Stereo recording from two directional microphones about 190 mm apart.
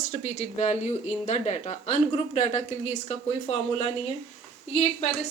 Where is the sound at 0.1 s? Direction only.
35° left (ahead or behind).